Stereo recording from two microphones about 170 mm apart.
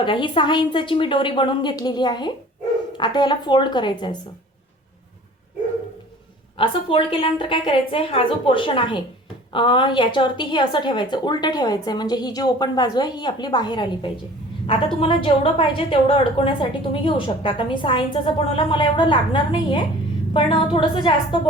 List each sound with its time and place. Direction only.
0.0 s a woman's voice: 30° left (ahead or behind)
6.6 s a woman's voice: 30° left (ahead or behind)